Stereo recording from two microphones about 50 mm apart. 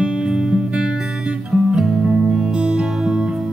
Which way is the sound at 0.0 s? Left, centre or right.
Centre.